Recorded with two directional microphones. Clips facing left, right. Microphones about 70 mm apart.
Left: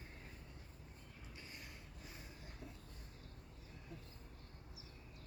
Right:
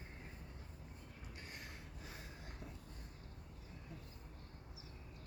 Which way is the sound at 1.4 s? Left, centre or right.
Right.